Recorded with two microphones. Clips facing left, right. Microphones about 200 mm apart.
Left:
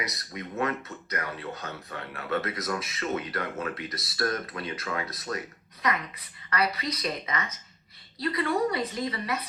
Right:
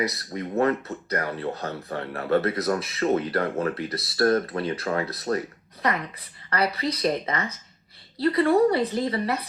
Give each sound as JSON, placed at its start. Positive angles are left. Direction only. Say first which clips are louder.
{"t": 0.0, "sound": "speech", "louder": "right 8 dB", "side_deg": -30}
{"t": 6.5, "sound": "speech", "louder": "right 4 dB", "side_deg": -30}